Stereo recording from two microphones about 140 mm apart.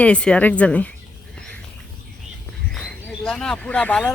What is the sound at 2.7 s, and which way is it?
Speech, centre (ahead or behind).